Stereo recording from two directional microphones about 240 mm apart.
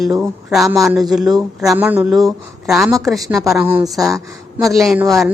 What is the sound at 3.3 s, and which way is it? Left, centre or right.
A woman's voice, centre.